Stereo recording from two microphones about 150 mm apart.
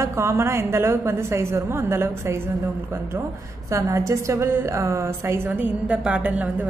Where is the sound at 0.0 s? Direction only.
20° right (ahead or behind).